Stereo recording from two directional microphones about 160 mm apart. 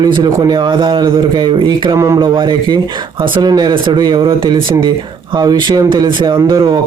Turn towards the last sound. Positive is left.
turn(degrees=-25)  # may be behind; listen again after turning